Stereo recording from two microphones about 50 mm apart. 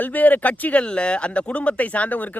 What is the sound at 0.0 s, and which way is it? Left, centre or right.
Speech, left.